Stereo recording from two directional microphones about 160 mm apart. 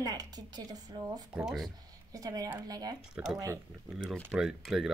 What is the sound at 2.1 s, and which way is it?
A woman's voice, 20° right (ahead or behind).